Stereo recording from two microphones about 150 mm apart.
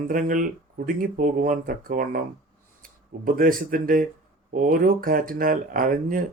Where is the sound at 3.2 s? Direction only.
70° right (ahead or behind).